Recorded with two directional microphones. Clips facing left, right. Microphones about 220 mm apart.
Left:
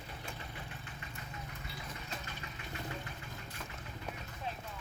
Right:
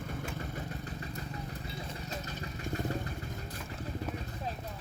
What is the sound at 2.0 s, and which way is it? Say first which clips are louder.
Vehicle: right 6 dB; 40° right (ahead or behind).